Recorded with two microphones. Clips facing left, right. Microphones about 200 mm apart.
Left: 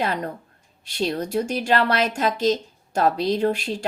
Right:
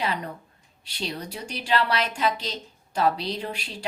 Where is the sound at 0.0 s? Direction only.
45° left (ahead or behind).